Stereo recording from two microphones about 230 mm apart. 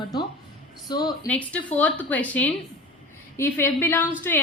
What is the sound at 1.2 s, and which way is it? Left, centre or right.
A woman's voice, centre.